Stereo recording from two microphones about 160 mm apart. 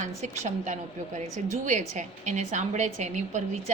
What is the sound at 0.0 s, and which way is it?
A woman's voice, 45° right (ahead or behind).